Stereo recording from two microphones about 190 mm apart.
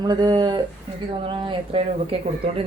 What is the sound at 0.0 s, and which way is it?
Speech, 20° right (ahead or behind).